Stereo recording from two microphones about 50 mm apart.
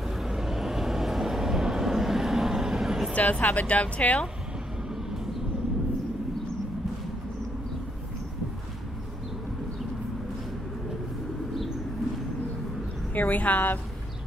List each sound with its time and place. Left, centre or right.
0.2 s vehicle: centre
3.2 s speech: left
13.1 s speech: left